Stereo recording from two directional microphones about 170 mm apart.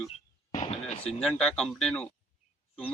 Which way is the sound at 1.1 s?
5° left (ahead or behind).